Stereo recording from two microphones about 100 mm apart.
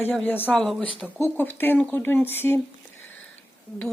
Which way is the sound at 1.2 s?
20° left (ahead or behind).